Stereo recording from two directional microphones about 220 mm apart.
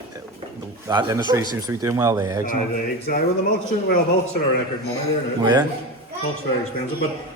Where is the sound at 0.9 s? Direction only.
15° right (ahead or behind).